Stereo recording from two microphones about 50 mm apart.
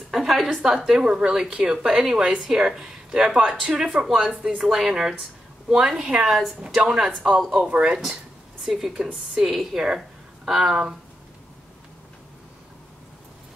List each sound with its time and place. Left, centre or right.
0.1 s a woman's voice: centre
6.2 s a woman's voice: centre
7.2 s speech: centre
8.6 s speech: centre
8.9 s speech: centre